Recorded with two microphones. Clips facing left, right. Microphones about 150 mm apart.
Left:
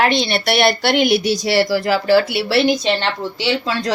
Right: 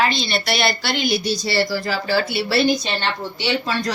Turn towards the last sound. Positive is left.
turn(degrees=90)